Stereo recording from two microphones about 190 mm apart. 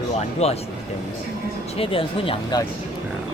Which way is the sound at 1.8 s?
30° left (ahead or behind).